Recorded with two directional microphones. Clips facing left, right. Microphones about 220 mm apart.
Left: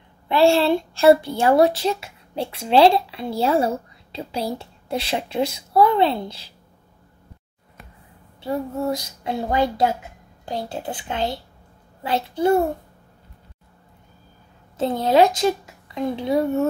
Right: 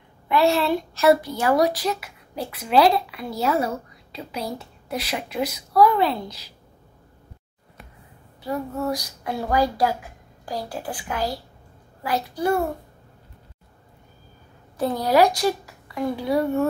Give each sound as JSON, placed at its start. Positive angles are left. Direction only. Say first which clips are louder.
{"t": 0.3, "sound": "a woman's voice", "louder": "left 3 dB", "side_deg": 30}
{"t": 8.4, "sound": "a woman's voice", "louder": "left 2 dB", "side_deg": 25}
{"t": 14.8, "sound": "a woman's voice", "louder": "left 2 dB", "side_deg": 25}